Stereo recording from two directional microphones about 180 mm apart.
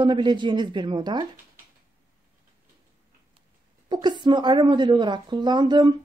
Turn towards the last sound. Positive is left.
turn(degrees=-25)  # may be behind; listen again after turning